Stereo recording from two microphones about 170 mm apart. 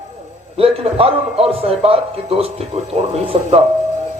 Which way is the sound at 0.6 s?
35° right (ahead or behind).